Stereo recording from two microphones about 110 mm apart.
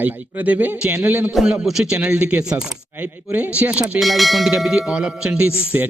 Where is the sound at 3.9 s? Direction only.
Centre (ahead or behind).